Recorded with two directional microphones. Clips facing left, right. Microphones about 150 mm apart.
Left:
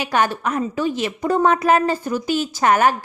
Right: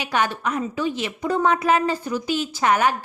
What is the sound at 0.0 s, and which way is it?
A woman's voice, 45° left (ahead or behind).